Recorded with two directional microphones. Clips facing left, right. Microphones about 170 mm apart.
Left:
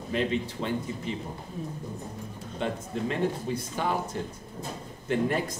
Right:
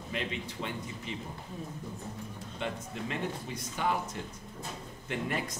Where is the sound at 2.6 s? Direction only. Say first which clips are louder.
Left 6 dB; 35° left (ahead or behind).